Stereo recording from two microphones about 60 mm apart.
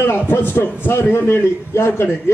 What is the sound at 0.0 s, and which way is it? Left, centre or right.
A man's voice, left.